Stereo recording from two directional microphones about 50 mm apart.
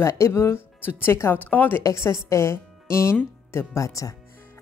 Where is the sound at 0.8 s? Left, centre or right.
Left.